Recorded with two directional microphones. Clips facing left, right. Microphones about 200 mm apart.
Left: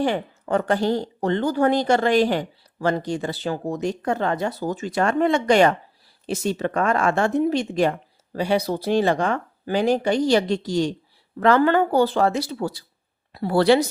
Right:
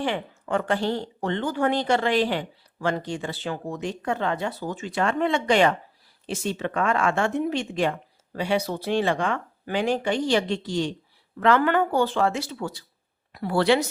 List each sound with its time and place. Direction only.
0.0 s speech: 40° left (ahead or behind)